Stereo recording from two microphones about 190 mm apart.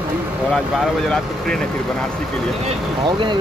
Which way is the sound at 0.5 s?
5° left (ahead or behind).